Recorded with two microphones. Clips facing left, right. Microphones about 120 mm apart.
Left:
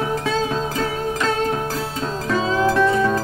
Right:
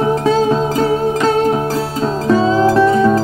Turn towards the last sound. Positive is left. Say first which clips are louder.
# right 6 dB
turn(degrees=-35)  # may be behind; listen again after turning